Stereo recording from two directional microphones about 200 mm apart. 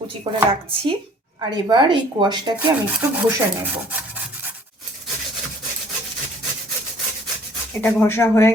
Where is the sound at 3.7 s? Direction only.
10° right (ahead or behind).